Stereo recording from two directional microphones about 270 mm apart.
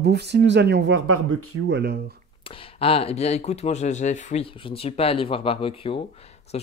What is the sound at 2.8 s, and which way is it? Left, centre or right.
Speech, left.